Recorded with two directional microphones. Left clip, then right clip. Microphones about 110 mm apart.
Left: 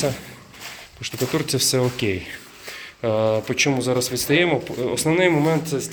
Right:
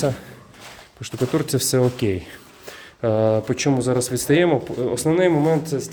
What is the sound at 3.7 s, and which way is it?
Speech, 80° right.